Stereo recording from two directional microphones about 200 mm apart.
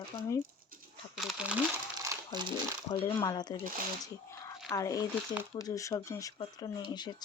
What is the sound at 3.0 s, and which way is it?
Speech, 20° left (ahead or behind).